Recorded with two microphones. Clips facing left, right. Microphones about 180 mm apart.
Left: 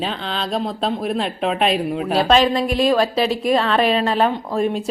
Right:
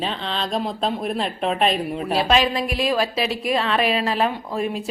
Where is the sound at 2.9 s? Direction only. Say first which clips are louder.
Left 5 dB; 35° left (ahead or behind).